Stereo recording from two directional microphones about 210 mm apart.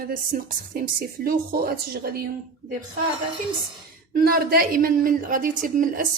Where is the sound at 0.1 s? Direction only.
40° right (ahead or behind).